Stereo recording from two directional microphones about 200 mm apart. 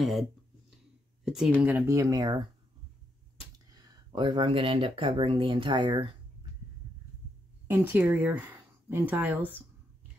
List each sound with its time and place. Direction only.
0.0 s speech: centre (ahead or behind); by 2.4 s 20° right (ahead or behind)
3.5 s speech: 20° right (ahead or behind)
7.6 s speech: 10° right (ahead or behind)